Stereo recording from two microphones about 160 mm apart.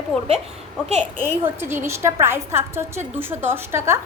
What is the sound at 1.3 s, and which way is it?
A woman's voice, 15° right (ahead or behind).